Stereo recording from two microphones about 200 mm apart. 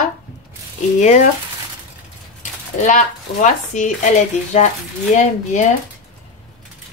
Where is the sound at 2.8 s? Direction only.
40° left (ahead or behind).